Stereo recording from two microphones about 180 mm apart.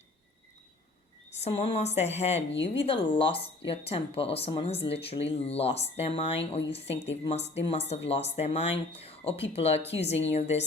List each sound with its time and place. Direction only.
1.4 s speech: 35° left (ahead or behind)